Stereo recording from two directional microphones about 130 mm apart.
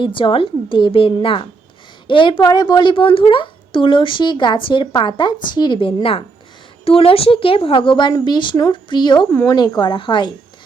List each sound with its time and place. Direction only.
0.0 s a woman's voice: 40° left (ahead or behind)